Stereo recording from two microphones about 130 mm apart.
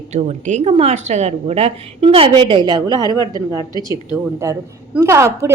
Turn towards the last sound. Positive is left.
turn(degrees=-20)  # may be behind; listen again after turning